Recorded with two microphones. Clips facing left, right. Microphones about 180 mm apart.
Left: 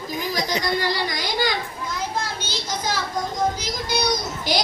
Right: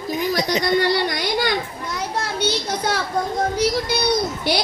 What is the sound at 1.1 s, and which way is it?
Speech, 55° right (ahead or behind).